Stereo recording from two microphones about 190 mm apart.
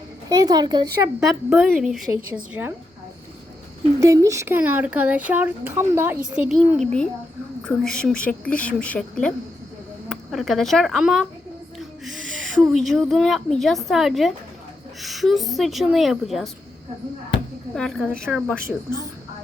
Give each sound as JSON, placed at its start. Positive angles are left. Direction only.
{"t": 0.3, "sound": "a woman's voice", "side_deg": -20}
{"t": 1.5, "sound": "a woman's voice", "side_deg": 0}
{"t": 4.0, "sound": "a woman's voice", "side_deg": -15}
{"t": 11.8, "sound": "owl", "side_deg": 0}
{"t": 12.7, "sound": "a woman's voice", "side_deg": 0}
{"t": 17.7, "sound": "a woman's voice", "side_deg": 5}